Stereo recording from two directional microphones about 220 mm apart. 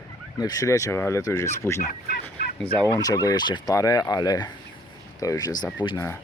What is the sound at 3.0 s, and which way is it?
Speech, 15° left (ahead or behind).